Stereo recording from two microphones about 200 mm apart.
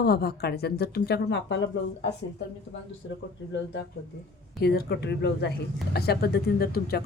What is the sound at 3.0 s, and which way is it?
Speech, 70° left (ahead or behind).